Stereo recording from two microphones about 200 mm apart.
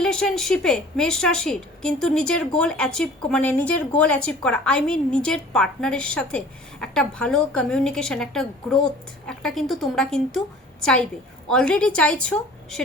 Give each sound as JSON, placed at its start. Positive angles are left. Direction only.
{"t": 0.0, "sound": "a woman's voice", "side_deg": 5}